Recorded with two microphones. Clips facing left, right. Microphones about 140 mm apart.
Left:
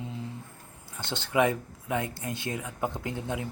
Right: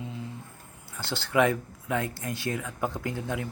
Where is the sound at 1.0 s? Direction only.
20° left (ahead or behind).